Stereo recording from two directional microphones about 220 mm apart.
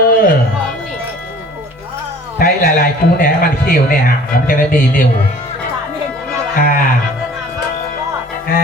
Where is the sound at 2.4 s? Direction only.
40° left (ahead or behind).